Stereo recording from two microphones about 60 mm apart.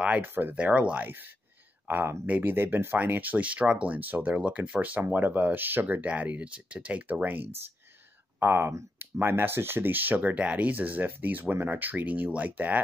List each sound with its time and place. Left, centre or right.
0.0 s speech: right
0.3 s speech: right
0.6 s speech: right
1.9 s speech: right
8.4 s speech: right